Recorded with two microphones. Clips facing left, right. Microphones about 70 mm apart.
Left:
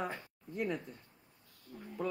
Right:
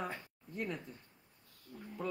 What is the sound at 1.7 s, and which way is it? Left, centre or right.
Speech, left.